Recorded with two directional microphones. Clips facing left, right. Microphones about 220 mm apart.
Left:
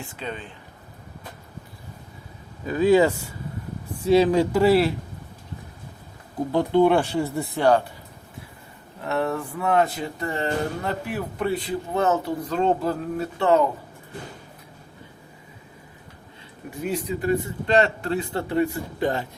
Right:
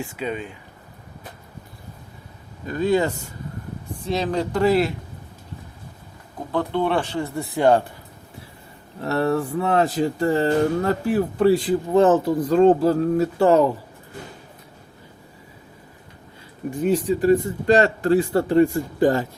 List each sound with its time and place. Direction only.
0.0 s speech: 10° right (ahead or behind)
2.6 s speech: 5° left (ahead or behind)
6.5 s speech: 15° left (ahead or behind)
7.5 s speech: 20° right (ahead or behind)
9.0 s a man's voice: 35° right (ahead or behind)
12.4 s speech: 50° right (ahead or behind)
12.6 s a man's voice: 40° right (ahead or behind)
16.8 s a man's voice: 35° right (ahead or behind)